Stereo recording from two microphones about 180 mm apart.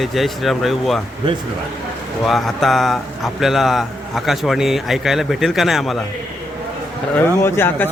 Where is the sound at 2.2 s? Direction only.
Centre (ahead or behind).